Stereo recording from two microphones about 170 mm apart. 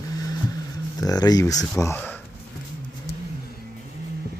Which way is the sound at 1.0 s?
20° left (ahead or behind).